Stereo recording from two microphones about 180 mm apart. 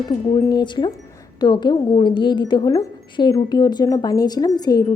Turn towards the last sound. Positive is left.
turn(degrees=20)  # may be behind; listen again after turning